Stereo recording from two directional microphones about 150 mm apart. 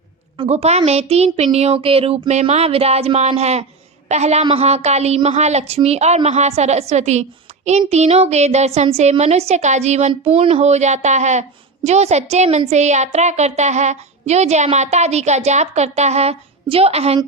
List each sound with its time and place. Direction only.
0.4 s a woman's voice: 45° right (ahead or behind)